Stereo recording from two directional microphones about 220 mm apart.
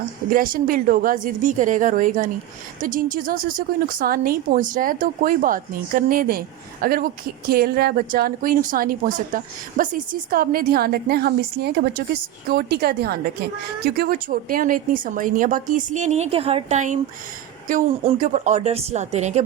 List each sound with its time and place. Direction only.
0.3 s speech: 40° right (ahead or behind)